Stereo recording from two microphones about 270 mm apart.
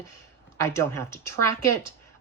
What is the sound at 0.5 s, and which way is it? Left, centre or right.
Speech, centre.